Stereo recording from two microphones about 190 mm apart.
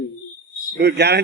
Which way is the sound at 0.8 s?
60° right (ahead or behind).